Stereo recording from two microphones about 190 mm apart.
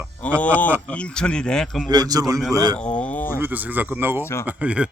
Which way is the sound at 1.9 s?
20° right (ahead or behind).